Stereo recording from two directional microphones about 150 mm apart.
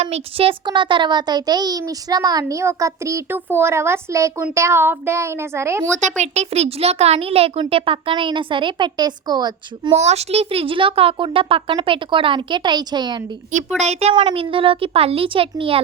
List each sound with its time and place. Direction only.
0.0 s a child's voice: 40° right (ahead or behind); by 5.9 s 20° right (ahead or behind)
6.0 s a child's voice: 50° right (ahead or behind); by 9.9 s 30° right (ahead or behind)
9.9 s a child's voice: 45° right (ahead or behind); by 13.2 s 30° right (ahead or behind)
13.5 s speech: 50° right (ahead or behind)
14.2 s a child's voice: 35° right (ahead or behind)